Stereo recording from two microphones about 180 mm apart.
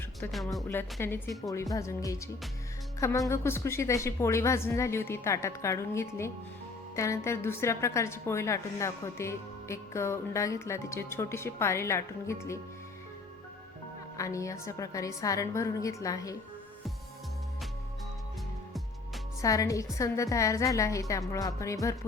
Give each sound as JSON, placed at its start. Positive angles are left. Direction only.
{"t": 0.3, "sound": "music", "side_deg": 0}
{"t": 0.6, "sound": "a woman's voice", "side_deg": 15}
{"t": 14.2, "sound": "a woman's voice", "side_deg": 15}
{"t": 19.4, "sound": "a woman's voice", "side_deg": 20}